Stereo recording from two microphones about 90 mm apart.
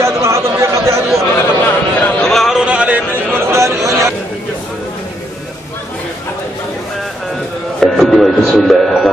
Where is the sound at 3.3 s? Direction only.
30° right (ahead or behind).